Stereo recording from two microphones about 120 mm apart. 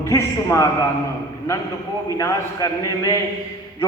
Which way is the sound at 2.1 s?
30° left (ahead or behind).